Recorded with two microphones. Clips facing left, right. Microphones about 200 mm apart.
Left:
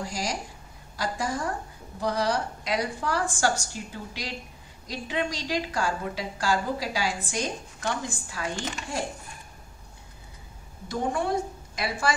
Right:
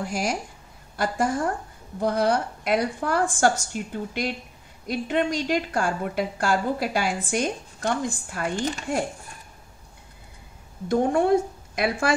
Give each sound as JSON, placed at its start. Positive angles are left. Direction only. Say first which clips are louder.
{"t": 0.0, "sound": "a woman's voice", "louder": "right 4 dB", "side_deg": -55}
{"t": 10.9, "sound": "speech", "louder": "right 8 dB", "side_deg": -55}